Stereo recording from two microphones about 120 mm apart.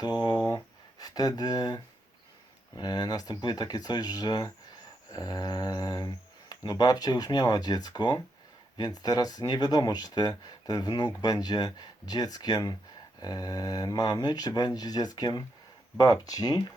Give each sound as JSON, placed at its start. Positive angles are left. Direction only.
{"t": 0.0, "sound": "speech", "side_deg": 35}